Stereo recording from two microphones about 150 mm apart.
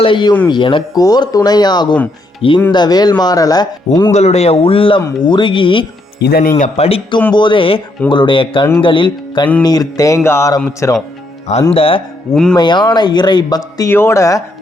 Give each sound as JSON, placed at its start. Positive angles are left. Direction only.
{"t": 0.0, "sound": "a man's voice", "side_deg": 30}
{"t": 4.1, "sound": "a man's voice", "side_deg": 45}
{"t": 6.2, "sound": "speech", "side_deg": 90}
{"t": 6.6, "sound": "a man's voice", "side_deg": 45}
{"t": 11.7, "sound": "a man's voice", "side_deg": 40}
{"t": 12.3, "sound": "speech", "side_deg": 5}
{"t": 12.5, "sound": "speech", "side_deg": 30}